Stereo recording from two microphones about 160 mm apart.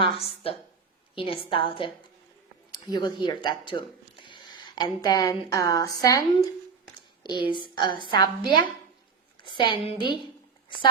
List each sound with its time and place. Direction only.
0.0 s a woman's voice: 35° left (ahead or behind)